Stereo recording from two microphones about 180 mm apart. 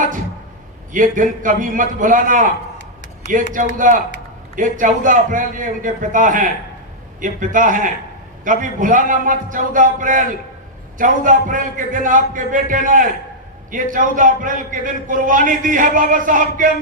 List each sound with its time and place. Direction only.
0.9 s a man's voice: 45° right (ahead or behind)